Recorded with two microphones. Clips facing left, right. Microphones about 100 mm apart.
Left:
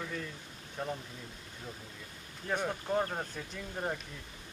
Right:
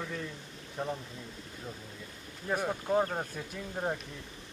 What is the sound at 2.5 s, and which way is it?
Speech, 10° right (ahead or behind).